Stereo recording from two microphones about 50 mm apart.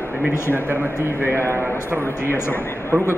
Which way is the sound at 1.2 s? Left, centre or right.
Right.